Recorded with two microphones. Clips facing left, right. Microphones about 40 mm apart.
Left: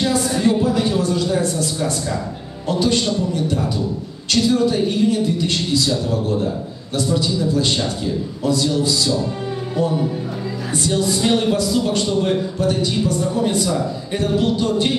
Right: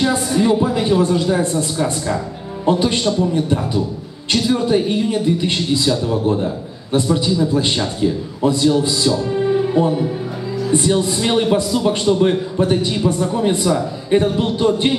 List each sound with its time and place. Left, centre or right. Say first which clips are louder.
0.3 s a man's voice: right 2 dB; centre
9.5 s music: right 6 dB; right
10.7 s a man's voice: right 3 dB; right